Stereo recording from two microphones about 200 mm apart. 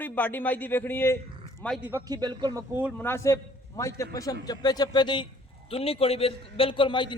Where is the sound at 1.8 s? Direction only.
15° right (ahead or behind).